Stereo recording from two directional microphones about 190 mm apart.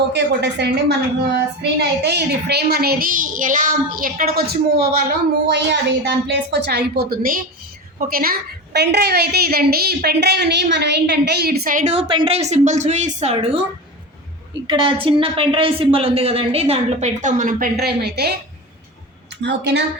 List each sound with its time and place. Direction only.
0.1 s a woman's voice: 60° right (ahead or behind); by 13.6 s 30° right (ahead or behind)
14.7 s a woman's voice: 25° right (ahead or behind); by 18.3 s 60° right (ahead or behind)
19.4 s a woman's voice: 65° right (ahead or behind)